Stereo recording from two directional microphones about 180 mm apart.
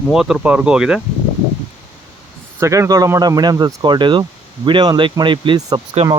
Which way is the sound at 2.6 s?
15° right (ahead or behind).